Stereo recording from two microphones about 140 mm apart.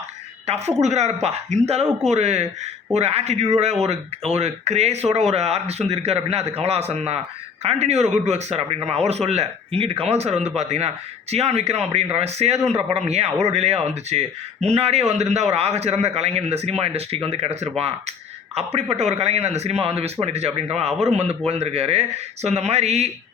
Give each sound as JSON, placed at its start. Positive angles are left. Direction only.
{"t": 0.4, "sound": "a man's voice", "side_deg": -50}